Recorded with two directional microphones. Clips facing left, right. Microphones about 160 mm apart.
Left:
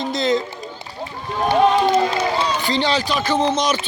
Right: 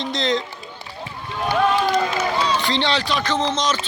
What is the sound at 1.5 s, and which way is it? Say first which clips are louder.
Run: left 4 dB; 25° left (ahead or behind).